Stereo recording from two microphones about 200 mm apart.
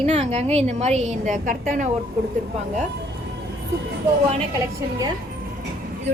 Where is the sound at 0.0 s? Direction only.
35° right (ahead or behind).